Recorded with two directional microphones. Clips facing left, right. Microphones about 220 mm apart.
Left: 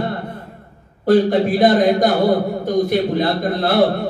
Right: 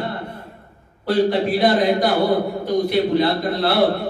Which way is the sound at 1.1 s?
45° left (ahead or behind).